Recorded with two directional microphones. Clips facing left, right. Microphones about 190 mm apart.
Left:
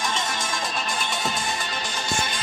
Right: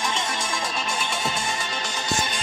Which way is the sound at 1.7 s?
5° left (ahead or behind).